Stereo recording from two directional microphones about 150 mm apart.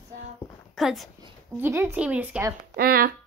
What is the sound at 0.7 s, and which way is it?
Speech, centre (ahead or behind).